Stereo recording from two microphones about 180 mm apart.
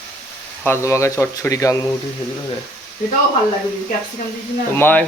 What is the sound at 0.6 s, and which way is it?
Speech, 15° left (ahead or behind).